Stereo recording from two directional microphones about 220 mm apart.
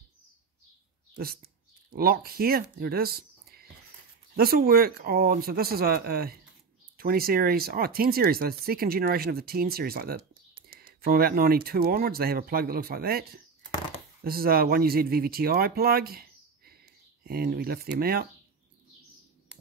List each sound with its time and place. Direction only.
1.1 s speech: 45° right (ahead or behind)